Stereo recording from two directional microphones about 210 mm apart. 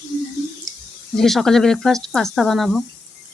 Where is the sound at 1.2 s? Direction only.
Centre (ahead or behind).